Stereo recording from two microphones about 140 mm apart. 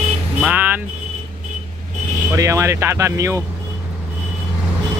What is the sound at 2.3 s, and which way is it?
Speech, 20° right (ahead or behind).